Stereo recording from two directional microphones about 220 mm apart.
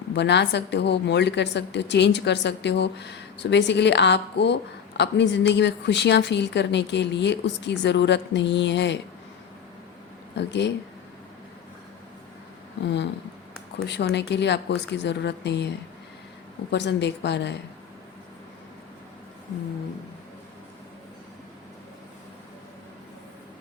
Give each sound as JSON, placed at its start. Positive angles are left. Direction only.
{"t": 0.1, "sound": "a woman's voice", "side_deg": 50}
{"t": 10.3, "sound": "a woman's voice", "side_deg": 50}
{"t": 12.8, "sound": "a woman's voice", "side_deg": 50}
{"t": 16.7, "sound": "a woman's voice", "side_deg": 50}